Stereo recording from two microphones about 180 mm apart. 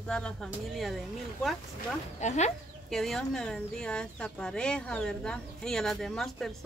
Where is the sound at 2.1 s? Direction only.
40° left (ahead or behind).